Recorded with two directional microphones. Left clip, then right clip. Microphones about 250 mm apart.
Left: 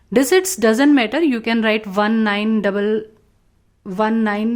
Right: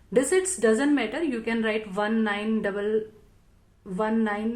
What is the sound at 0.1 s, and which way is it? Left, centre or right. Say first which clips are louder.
A woman's voice: left 8 dB; left.